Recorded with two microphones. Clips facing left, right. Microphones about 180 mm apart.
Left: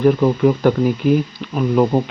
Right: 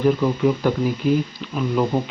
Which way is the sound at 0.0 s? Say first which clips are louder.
Left 4 dB; 50° left (ahead or behind).